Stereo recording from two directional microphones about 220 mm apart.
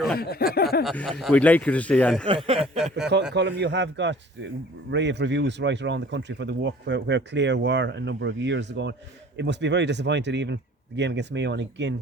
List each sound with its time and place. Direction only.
0.2 s speech: 45° left (ahead or behind)
0.9 s speech: 5° left (ahead or behind)
2.2 s speech: 25° right (ahead or behind)
3.3 s a man's voice: 50° right (ahead or behind)